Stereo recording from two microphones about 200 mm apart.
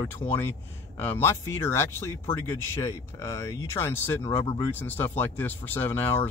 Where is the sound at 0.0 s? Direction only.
10° left (ahead or behind).